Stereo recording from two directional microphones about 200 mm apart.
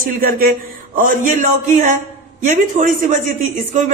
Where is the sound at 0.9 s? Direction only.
40° right (ahead or behind).